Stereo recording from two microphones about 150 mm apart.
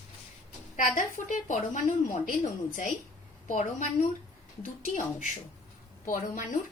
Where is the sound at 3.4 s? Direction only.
60° left (ahead or behind).